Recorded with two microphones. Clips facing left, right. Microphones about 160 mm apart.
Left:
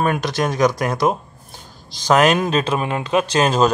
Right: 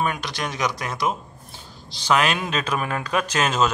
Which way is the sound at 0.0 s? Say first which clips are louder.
Left 7 dB; 50° left (ahead or behind).